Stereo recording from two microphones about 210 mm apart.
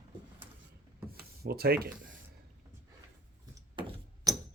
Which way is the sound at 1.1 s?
45° right (ahead or behind).